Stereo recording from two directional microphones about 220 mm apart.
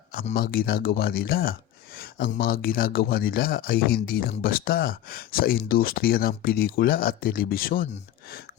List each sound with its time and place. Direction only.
0.3 s speech: 40° left (ahead or behind)